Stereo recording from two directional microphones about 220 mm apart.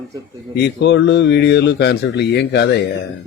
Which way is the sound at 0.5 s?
50° left (ahead or behind).